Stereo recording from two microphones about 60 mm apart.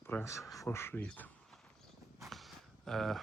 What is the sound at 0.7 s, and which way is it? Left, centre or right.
Speech, left.